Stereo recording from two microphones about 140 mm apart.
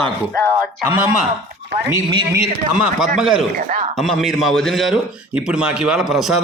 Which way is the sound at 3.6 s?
90° right.